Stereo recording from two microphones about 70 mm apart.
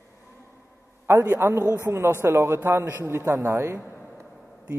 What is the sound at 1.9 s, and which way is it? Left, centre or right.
Speech, right.